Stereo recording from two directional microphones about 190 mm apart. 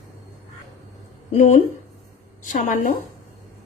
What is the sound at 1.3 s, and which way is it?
Speech, 35° left (ahead or behind).